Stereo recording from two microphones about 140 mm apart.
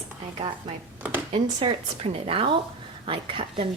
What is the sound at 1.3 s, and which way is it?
A woman's voice, 45° right (ahead or behind).